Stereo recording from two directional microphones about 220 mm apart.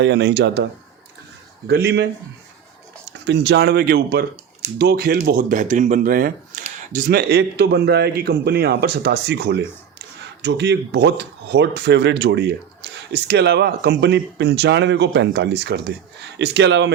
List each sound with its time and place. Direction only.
0.0 s speech: 50° right (ahead or behind)
3.1 s speech: 50° right (ahead or behind)